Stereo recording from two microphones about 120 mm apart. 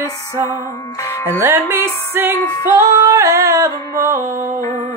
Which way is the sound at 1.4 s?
20° right (ahead or behind).